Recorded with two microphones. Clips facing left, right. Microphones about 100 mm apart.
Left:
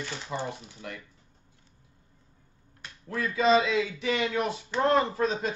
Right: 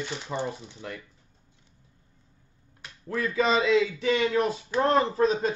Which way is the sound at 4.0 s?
35° right (ahead or behind).